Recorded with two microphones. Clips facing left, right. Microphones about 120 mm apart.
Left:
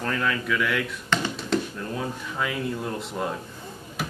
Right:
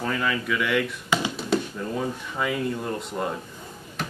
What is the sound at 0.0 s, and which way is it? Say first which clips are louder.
Speech: even; 5° right (ahead or behind).